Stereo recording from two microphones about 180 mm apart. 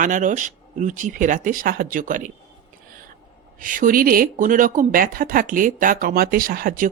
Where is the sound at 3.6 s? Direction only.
50° right (ahead or behind).